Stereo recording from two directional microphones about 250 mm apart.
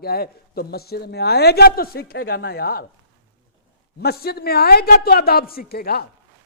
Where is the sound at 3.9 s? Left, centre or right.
Left.